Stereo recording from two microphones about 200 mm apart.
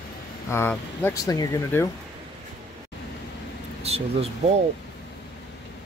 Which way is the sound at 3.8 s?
30° right (ahead or behind).